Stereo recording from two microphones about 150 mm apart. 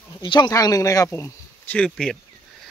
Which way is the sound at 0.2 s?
30° left (ahead or behind).